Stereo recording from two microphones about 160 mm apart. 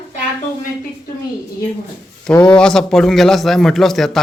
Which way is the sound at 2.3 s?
10° left (ahead or behind).